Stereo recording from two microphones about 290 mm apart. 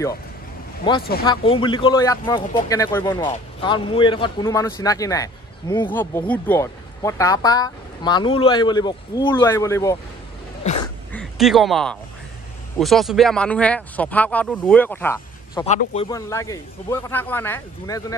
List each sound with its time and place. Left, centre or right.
1.2 s speech: centre
11.1 s speech: centre
15.6 s speech: left
16.1 s speech: centre